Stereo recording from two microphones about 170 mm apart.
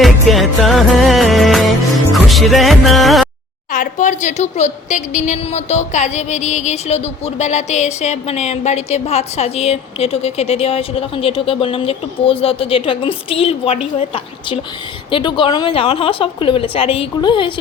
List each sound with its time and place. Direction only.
0.0 s music: centre (ahead or behind)
3.7 s a woman's voice: 50° left (ahead or behind); by 17.5 s 25° left (ahead or behind)